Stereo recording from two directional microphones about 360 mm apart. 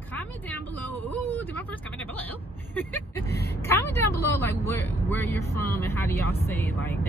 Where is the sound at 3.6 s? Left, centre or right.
Centre.